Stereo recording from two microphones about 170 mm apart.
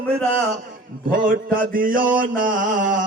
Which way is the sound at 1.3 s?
55° right (ahead or behind).